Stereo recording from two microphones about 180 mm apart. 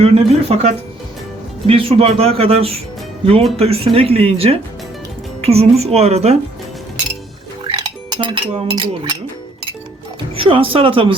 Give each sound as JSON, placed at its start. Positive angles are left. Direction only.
{"t": 0.0, "sound": "a man's voice", "side_deg": -35}
{"t": 7.7, "sound": "speech", "side_deg": -25}
{"t": 10.3, "sound": "speech", "side_deg": -30}